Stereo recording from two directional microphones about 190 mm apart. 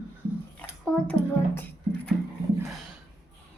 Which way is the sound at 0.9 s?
5° left (ahead or behind).